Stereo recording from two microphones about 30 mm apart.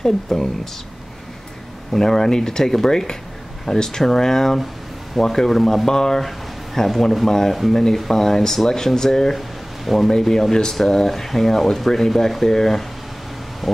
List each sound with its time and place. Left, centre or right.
0.0 s speech: left
1.9 s speech: centre
9.8 s speech: centre